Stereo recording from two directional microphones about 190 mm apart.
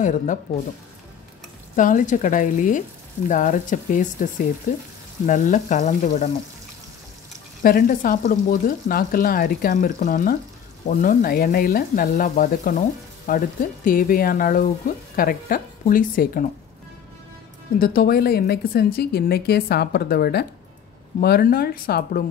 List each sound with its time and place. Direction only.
0.0 s frying: 40° left (ahead or behind)
1.8 s speech: 45° left (ahead or behind)
5.2 s frying: 40° left (ahead or behind)
7.6 s speech: 50° left (ahead or behind)
17.7 s speech: 50° left (ahead or behind)